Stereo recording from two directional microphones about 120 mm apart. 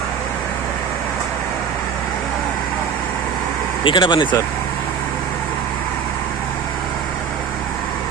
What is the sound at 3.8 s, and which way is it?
Speech, 40° left (ahead or behind).